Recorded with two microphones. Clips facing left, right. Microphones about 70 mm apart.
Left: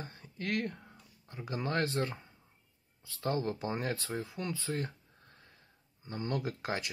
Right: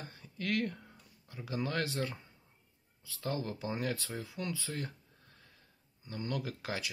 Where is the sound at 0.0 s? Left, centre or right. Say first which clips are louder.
Even; left.